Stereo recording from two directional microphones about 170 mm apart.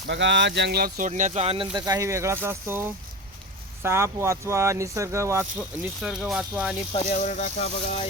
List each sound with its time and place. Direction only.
0.1 s speech: 90° right; by 1.6 s 40° right (ahead or behind)
1.7 s speech: 20° right (ahead or behind)
6.0 s speech: 5° right (ahead or behind)
6.9 s speech: 45° left (ahead or behind)